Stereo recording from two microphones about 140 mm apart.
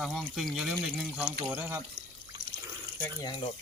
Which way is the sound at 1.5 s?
15° right (ahead or behind).